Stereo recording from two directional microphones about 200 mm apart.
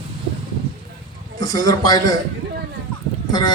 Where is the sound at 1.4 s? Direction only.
20° left (ahead or behind).